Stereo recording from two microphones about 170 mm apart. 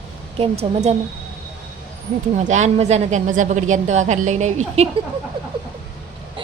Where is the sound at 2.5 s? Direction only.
40° right (ahead or behind).